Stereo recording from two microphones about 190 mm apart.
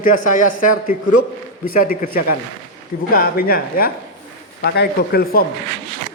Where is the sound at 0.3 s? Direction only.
45° left (ahead or behind).